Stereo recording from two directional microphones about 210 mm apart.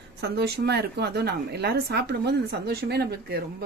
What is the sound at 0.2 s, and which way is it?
Speech, 50° right (ahead or behind).